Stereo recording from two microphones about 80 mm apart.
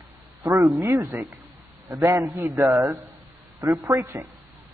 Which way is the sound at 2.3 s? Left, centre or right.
Centre.